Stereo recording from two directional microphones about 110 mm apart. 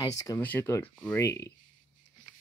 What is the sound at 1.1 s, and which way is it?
Speech, 25° left (ahead or behind).